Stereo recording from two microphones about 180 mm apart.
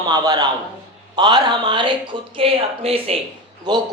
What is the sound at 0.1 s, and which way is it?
Speech, 20° right (ahead or behind).